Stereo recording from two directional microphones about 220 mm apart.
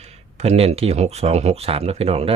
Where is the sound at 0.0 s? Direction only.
30° right (ahead or behind).